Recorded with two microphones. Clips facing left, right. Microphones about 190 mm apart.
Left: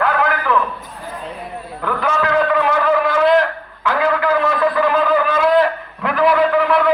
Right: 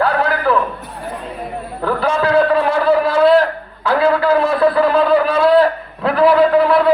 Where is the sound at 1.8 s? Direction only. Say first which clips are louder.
Right 3 dB; 35° right (ahead or behind).